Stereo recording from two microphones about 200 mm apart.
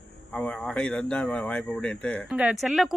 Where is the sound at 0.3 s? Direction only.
5° left (ahead or behind).